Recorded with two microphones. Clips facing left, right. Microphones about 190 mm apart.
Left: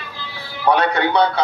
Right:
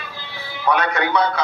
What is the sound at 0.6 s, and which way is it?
Speech, 30° left (ahead or behind).